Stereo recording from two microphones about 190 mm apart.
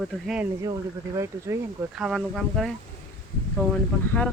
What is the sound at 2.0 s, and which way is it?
Speech, centre (ahead or behind).